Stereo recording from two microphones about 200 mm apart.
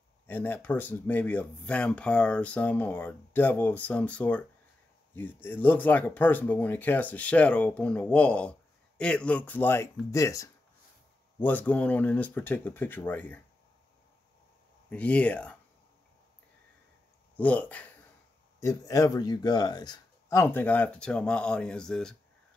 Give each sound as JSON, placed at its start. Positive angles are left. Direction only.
{"t": 0.3, "sound": "speech", "side_deg": 10}
{"t": 14.9, "sound": "speech", "side_deg": 5}
{"t": 17.4, "sound": "speech", "side_deg": 5}